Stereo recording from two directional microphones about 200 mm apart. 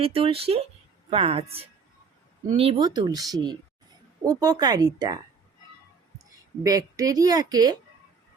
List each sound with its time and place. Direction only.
0.0 s speech: 25° right (ahead or behind)
6.6 s speech: 15° right (ahead or behind)